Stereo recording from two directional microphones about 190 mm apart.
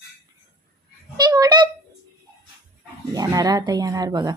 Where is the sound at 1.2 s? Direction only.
20° right (ahead or behind).